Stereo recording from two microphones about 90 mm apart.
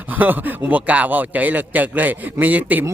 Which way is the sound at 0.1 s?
20° right (ahead or behind).